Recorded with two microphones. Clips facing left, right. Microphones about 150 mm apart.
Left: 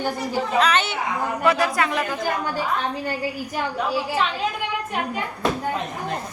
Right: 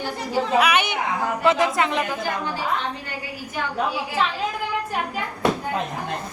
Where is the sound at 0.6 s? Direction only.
15° right (ahead or behind).